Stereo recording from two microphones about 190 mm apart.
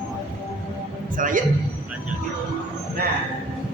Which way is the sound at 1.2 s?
45° right (ahead or behind).